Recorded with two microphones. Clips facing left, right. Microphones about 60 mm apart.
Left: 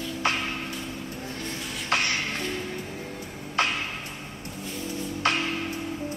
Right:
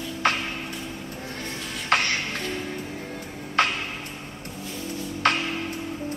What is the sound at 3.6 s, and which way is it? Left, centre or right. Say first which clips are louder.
Music: right 3 dB; right.